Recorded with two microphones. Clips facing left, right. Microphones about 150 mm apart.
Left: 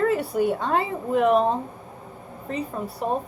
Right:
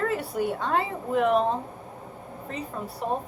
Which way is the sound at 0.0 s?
20° left (ahead or behind).